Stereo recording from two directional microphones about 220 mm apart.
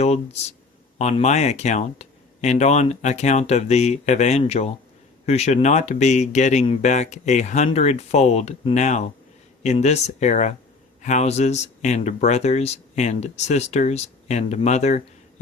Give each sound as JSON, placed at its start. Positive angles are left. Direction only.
{"t": 0.9, "sound": "speech", "side_deg": 30}